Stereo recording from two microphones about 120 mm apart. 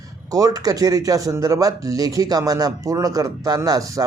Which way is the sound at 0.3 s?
30° right (ahead or behind).